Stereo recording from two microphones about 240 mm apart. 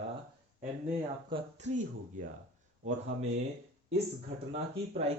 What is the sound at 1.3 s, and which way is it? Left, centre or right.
Speech, right.